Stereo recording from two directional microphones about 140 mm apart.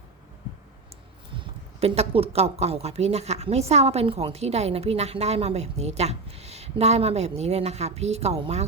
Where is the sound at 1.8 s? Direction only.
45° right (ahead or behind).